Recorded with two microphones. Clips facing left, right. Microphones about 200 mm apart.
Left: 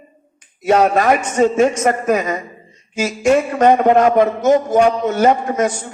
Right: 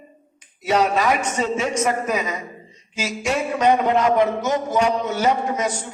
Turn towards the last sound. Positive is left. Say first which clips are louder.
# left 6 dB
turn(degrees=50)  # may be behind; listen again after turning